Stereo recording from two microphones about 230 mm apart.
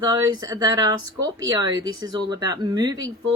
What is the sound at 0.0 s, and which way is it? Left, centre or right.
Speech, centre.